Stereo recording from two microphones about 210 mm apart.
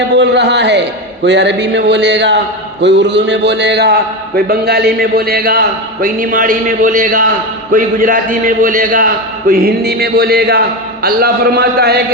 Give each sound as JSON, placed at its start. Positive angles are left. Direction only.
{"t": 0.0, "sound": "a man's voice", "side_deg": -55}